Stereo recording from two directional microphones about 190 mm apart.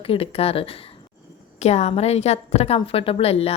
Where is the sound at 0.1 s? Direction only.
30° left (ahead or behind).